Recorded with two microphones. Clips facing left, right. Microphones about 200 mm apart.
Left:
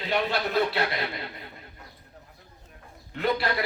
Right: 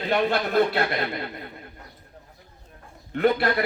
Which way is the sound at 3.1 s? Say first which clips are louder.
Right 6 dB; 55° right (ahead or behind).